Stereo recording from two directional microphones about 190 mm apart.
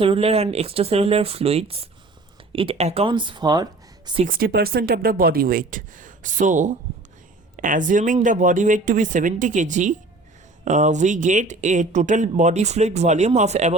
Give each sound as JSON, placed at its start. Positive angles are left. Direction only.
{"t": 0.0, "sound": "speech", "side_deg": -30}
{"t": 4.3, "sound": "speech", "side_deg": -50}